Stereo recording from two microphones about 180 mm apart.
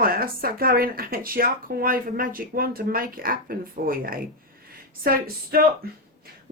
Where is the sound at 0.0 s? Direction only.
55° right (ahead or behind).